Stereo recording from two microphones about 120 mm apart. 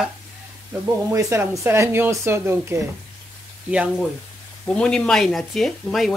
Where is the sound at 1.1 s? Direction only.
25° right (ahead or behind).